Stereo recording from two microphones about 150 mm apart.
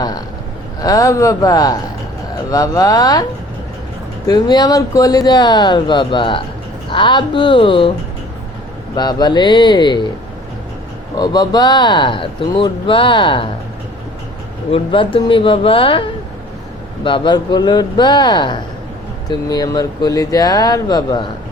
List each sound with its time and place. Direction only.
0.8 s speech: 20° left (ahead or behind)
4.3 s speech: 25° left (ahead or behind)
9.0 s speech: 30° left (ahead or behind)
11.2 s speech: 25° left (ahead or behind)
14.7 s speech: 35° left (ahead or behind)